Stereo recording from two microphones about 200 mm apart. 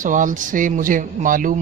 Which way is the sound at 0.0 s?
40° right (ahead or behind).